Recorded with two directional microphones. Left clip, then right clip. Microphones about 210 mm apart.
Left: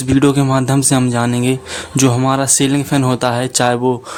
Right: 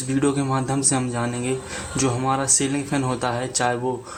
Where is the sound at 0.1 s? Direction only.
45° left (ahead or behind).